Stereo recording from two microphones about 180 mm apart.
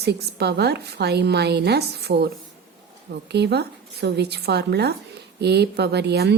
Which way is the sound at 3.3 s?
70° right (ahead or behind).